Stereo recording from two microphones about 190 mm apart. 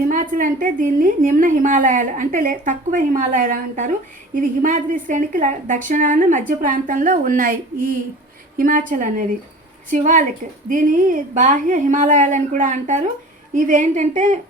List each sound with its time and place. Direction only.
0.1 s a woman's voice: 45° right (ahead or behind)